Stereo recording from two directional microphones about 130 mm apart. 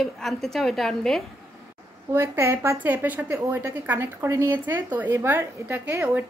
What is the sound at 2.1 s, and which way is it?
A woman's voice, 20° right (ahead or behind).